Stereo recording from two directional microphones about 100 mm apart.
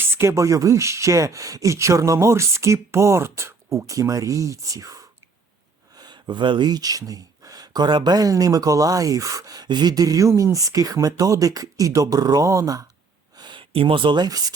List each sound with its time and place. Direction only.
0.0 s speech: 30° right (ahead or behind)
6.0 s speech: 45° right (ahead or behind)
13.3 s a sound: 50° right (ahead or behind)